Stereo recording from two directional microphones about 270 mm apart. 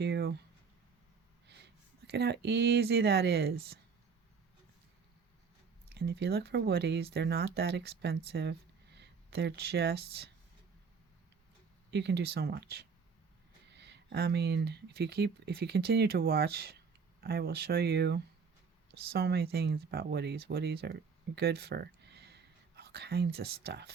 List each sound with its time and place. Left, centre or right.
0.0 s a sound: right
1.5 s speech: right
5.9 s speech: right
11.9 s speech: right